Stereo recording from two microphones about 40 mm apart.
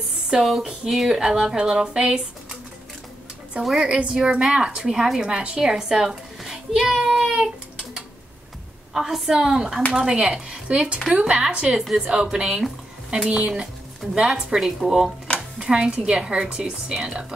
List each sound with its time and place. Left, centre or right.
0.3 s speech: centre
3.7 s speech: right
4.8 s speech: centre
5.3 s speech: right
5.6 s a child's voice: centre
11.7 s speech: centre
14.5 s speech: centre
15.3 s a sound: left
15.6 s speech: centre
16.3 s speech: right